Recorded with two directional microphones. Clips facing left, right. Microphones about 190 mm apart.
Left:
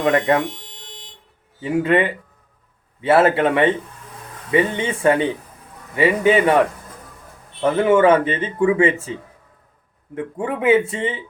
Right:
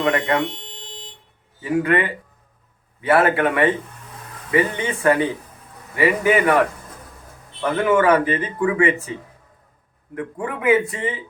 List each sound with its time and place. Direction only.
0.7 s buzzer: 30° right (ahead or behind)
1.6 s speech: 25° left (ahead or behind)
7.6 s speech: 25° left (ahead or behind)
10.2 s speech: 25° left (ahead or behind)